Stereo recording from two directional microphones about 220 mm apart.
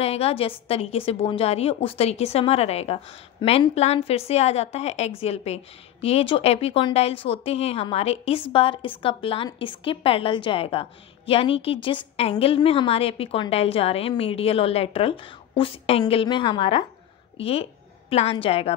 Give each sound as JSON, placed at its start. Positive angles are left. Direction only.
{"t": 0.0, "sound": "a woman's voice", "side_deg": 25}